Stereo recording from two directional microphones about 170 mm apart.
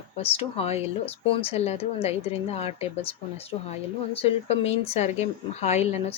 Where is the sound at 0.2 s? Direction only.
35° left (ahead or behind).